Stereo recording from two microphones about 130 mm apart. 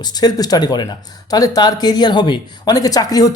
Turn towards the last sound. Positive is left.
turn(degrees=30)  # may be behind; listen again after turning